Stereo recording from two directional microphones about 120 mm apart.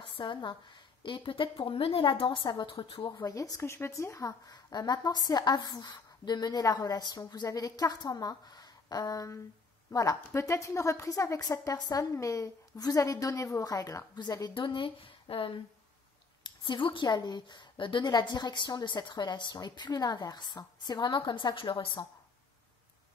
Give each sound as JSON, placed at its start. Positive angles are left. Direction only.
{"t": 0.0, "sound": "a woman's voice", "side_deg": 40}
{"t": 3.3, "sound": "a woman's voice", "side_deg": 30}